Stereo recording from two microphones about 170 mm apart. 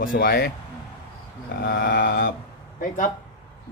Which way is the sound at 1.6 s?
60° left (ahead or behind).